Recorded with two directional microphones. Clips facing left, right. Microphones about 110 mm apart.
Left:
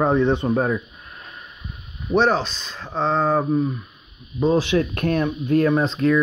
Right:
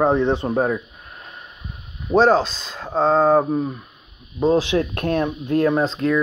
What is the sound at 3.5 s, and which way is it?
Speech, 35° right (ahead or behind).